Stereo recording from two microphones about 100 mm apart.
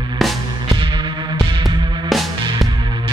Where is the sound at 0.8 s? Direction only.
55° right (ahead or behind).